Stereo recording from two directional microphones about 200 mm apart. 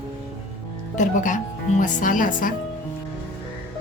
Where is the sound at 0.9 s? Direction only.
40° left (ahead or behind).